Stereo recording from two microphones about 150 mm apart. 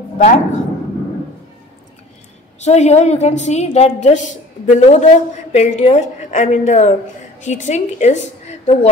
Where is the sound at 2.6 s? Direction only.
50° left (ahead or behind).